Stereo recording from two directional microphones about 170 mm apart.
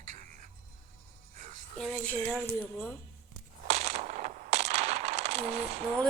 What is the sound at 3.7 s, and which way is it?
Coin, 40° right (ahead or behind).